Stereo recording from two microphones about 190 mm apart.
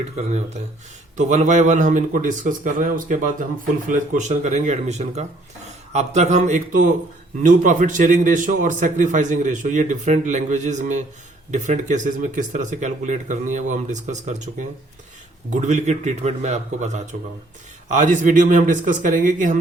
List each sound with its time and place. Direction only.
1.1 s a man's voice: 40° right (ahead or behind)